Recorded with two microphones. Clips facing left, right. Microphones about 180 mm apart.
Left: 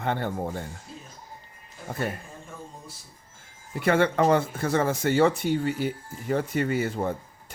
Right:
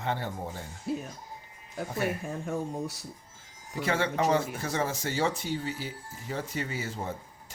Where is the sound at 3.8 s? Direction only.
55° left (ahead or behind).